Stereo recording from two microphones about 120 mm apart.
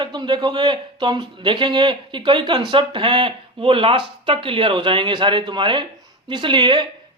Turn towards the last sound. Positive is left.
turn(degrees=-40)  # may be behind; listen again after turning